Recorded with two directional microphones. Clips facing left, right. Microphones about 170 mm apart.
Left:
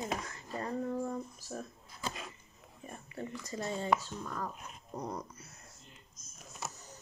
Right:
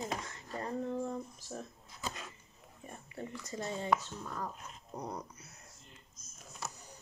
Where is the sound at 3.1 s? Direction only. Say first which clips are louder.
Left 2 dB; 20° right (ahead or behind).